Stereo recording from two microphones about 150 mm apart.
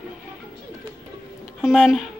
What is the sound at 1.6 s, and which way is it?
Speech, 5° right (ahead or behind).